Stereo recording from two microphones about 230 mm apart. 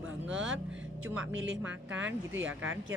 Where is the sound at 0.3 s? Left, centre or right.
Right.